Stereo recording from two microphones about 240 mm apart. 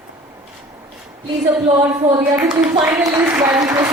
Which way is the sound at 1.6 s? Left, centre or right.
Centre.